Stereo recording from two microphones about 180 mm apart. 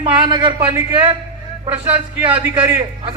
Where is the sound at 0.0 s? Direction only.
25° right (ahead or behind).